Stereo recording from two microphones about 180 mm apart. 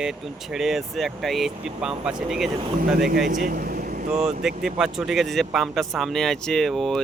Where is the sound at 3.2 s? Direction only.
50° right (ahead or behind).